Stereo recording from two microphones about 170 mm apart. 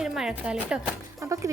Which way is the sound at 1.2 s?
20° right (ahead or behind).